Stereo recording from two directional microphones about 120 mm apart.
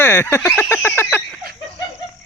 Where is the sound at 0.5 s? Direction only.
20° left (ahead or behind).